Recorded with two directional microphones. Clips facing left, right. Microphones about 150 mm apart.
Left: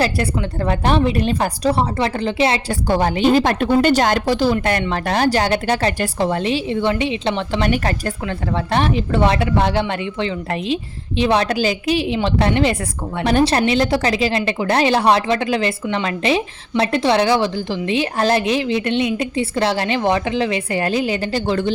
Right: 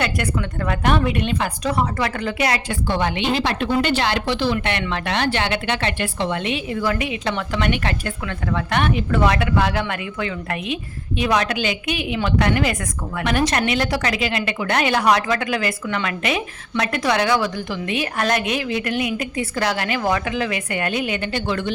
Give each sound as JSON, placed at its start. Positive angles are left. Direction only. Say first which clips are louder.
{"t": 0.0, "sound": "speech", "louder": "left 4 dB", "side_deg": 30}
{"t": 2.8, "sound": "a woman's voice", "louder": "left 7 dB", "side_deg": 40}